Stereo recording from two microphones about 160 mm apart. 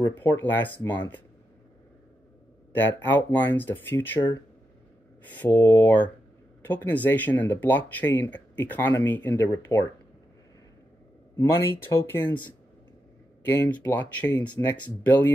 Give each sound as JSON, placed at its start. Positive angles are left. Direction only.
{"t": 0.0, "sound": "speech", "side_deg": 15}
{"t": 2.7, "sound": "speech", "side_deg": 15}
{"t": 5.3, "sound": "speech", "side_deg": 15}
{"t": 9.7, "sound": "speech", "side_deg": 25}
{"t": 11.3, "sound": "speech", "side_deg": 15}